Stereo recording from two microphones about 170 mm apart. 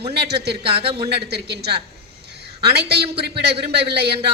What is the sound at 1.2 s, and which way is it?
A woman's voice, 75° right (ahead or behind).